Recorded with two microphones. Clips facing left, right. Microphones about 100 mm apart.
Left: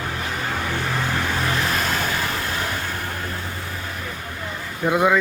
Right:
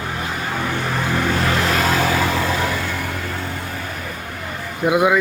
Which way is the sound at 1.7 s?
90° right.